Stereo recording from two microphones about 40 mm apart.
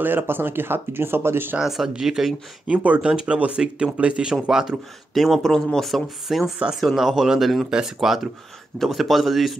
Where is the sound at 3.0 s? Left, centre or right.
Right.